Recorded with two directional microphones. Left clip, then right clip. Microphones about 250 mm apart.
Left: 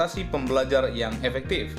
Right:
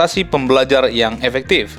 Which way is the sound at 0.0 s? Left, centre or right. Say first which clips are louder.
Right 11 dB; right.